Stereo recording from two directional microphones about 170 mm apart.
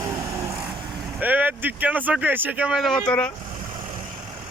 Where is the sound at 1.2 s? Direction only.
10° right (ahead or behind); by 3.3 s 5° left (ahead or behind).